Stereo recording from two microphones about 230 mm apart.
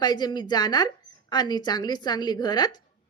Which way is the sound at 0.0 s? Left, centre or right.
Centre.